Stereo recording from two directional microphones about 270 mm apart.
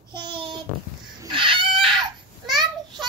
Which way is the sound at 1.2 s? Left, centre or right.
Centre.